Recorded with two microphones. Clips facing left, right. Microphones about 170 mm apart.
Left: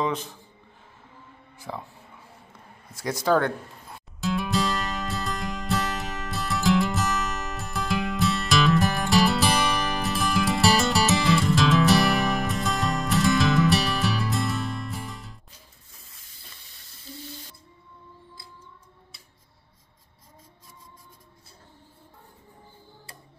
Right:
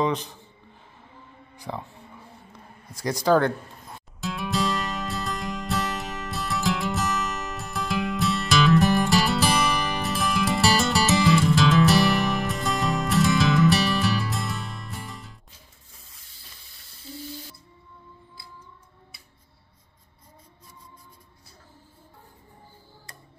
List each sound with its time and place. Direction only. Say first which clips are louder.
0.0 s a man's voice: right 2 dB; centre (ahead or behind)
1.6 s speech: right 2 dB; centre (ahead or behind)
2.9 s music: right 2 dB; 5° left (ahead or behind)